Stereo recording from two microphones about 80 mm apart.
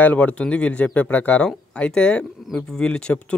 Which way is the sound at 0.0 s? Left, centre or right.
Centre.